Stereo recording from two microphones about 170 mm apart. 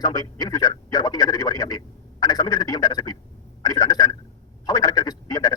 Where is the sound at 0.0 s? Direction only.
20° left (ahead or behind).